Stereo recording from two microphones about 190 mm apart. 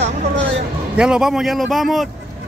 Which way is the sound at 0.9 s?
5° right (ahead or behind).